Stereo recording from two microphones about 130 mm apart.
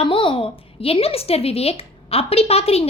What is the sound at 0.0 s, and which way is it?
A woman's voice, 45° left (ahead or behind).